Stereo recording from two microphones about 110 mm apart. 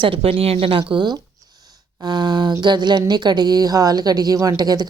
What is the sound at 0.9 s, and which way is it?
Speech, 40° right (ahead or behind).